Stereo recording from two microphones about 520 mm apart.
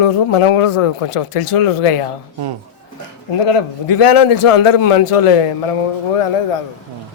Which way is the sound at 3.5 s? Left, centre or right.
Left.